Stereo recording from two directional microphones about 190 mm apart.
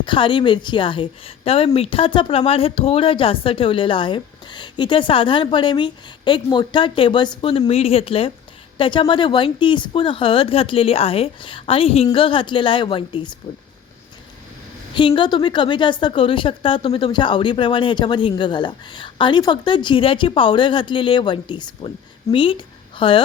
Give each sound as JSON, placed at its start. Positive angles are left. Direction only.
{"t": 0.0, "sound": "speech", "side_deg": 25}
{"t": 14.9, "sound": "speech", "side_deg": 25}